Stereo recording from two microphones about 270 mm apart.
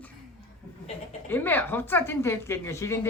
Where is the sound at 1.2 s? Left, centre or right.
Centre.